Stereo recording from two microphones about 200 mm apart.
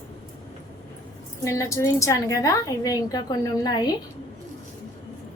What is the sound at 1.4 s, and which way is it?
A woman's voice, 15° left (ahead or behind).